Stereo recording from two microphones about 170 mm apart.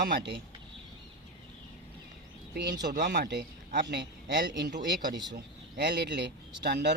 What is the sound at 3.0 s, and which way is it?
Speech, 75° right (ahead or behind).